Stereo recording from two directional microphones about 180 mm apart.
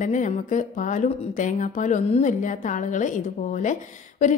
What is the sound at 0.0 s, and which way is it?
A woman's voice, 45° left (ahead or behind).